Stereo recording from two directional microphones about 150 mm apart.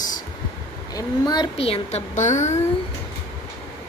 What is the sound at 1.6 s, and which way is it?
Speech, 40° left (ahead or behind).